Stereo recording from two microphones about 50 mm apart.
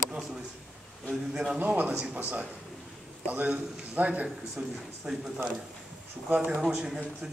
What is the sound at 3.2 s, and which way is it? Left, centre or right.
A man's voice, right.